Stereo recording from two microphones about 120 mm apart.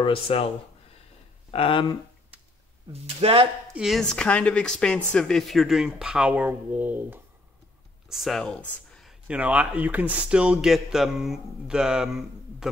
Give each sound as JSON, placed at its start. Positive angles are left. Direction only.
{"t": 0.0, "sound": "speech", "side_deg": 50}
{"t": 1.5, "sound": "speech", "side_deg": 45}
{"t": 2.9, "sound": "speech", "side_deg": -55}
{"t": 3.7, "sound": "speech", "side_deg": 0}
{"t": 8.1, "sound": "speech", "side_deg": 0}
{"t": 9.3, "sound": "a man's voice", "side_deg": -10}